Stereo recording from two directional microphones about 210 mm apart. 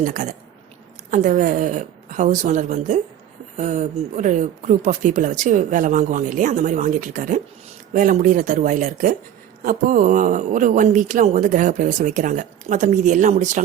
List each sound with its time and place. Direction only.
0.0 s speech: 40° right (ahead or behind)